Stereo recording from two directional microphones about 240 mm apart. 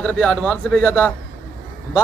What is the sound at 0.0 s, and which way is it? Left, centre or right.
A man's voice, centre.